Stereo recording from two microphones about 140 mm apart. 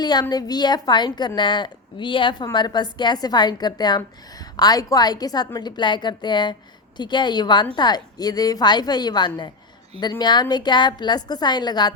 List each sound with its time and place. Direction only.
0.0 s a woman's voice: 30° left (ahead or behind)